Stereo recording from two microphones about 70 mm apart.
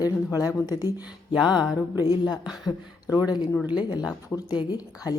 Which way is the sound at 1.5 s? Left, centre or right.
Left.